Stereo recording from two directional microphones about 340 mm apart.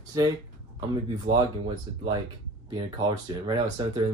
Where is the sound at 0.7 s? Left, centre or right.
Centre.